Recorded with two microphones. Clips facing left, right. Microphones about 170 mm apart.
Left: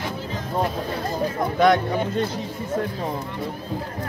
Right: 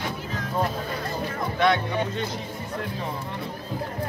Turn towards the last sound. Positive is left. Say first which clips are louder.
# left 4 dB
turn(degrees=40)  # may be behind; listen again after turning